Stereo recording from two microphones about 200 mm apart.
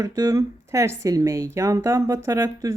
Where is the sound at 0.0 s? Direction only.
15° right (ahead or behind).